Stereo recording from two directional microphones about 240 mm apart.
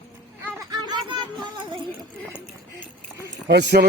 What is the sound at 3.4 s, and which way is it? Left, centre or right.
Speech, right.